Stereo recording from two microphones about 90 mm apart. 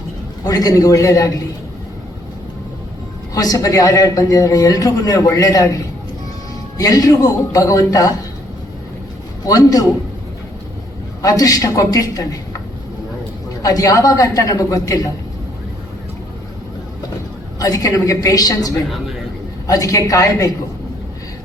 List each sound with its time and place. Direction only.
0.4 s a man's voice: 40° left (ahead or behind)
3.3 s a man's voice: 40° left (ahead or behind)
9.5 s a man's voice: 40° left (ahead or behind)
11.2 s a man's voice: 40° left (ahead or behind)
13.6 s a man's voice: 40° left (ahead or behind)
17.6 s a man's voice: 40° left (ahead or behind)